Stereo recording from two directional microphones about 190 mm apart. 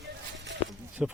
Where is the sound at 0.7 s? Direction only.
5° right (ahead or behind).